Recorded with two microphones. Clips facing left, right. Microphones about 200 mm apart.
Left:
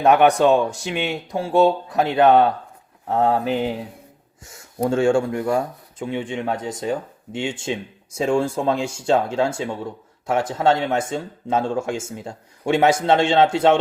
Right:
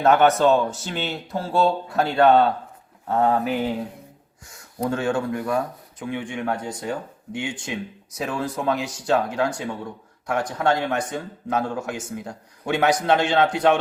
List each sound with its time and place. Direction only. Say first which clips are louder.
0.0 s speech: left 2 dB; 15° left (ahead or behind)